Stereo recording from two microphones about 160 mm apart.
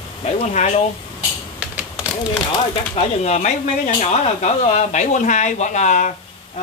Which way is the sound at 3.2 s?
50° left (ahead or behind).